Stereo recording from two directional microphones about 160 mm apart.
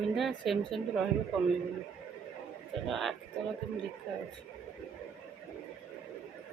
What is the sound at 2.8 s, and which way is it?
Speech, centre (ahead or behind).